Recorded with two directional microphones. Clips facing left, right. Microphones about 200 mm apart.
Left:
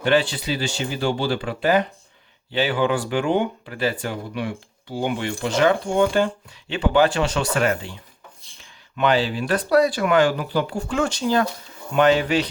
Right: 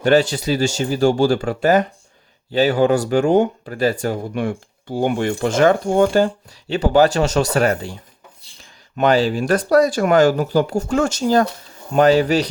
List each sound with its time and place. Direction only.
0.0 s speech: 45° right (ahead or behind)
9.0 s speech: 45° right (ahead or behind)